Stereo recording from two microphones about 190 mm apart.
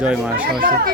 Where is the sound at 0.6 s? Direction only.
45° right (ahead or behind).